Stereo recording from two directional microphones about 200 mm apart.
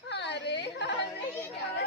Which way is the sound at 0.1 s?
60° left (ahead or behind).